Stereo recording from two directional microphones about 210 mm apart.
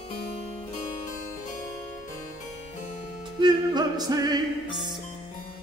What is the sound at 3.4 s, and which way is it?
Music, 20° right (ahead or behind).